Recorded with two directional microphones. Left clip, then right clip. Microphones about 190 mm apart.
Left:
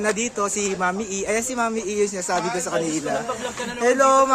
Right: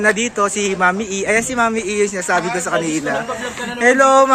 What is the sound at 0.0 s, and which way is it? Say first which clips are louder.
Speech: right 7 dB; centre (ahead or behind).